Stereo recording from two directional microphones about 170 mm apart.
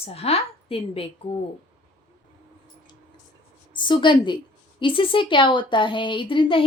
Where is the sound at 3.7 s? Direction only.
30° left (ahead or behind).